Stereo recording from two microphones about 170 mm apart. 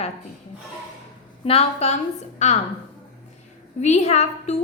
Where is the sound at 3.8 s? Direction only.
40° left (ahead or behind).